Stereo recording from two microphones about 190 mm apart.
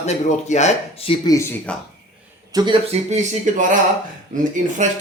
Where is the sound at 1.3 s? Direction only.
15° left (ahead or behind).